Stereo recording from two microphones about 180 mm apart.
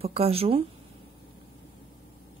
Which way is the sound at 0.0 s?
35° right (ahead or behind).